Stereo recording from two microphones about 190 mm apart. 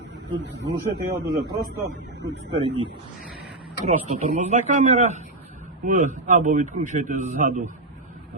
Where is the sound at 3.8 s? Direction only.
40° right (ahead or behind).